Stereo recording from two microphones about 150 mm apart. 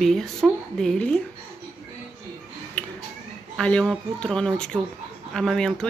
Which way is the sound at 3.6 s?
5° left (ahead or behind).